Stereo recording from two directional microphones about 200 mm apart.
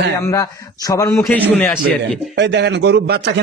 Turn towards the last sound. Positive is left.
turn(degrees=-55)  # may be behind; listen again after turning